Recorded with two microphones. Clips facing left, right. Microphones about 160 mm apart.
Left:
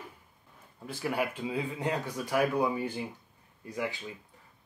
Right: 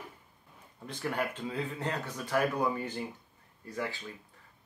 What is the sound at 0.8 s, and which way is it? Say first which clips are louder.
Speech: left 2 dB; 5° left (ahead or behind).